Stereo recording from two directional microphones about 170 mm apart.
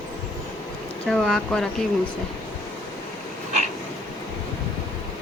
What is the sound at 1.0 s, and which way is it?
Speech, centre (ahead or behind).